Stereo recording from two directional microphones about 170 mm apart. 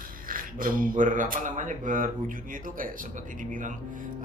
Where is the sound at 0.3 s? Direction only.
55° right (ahead or behind).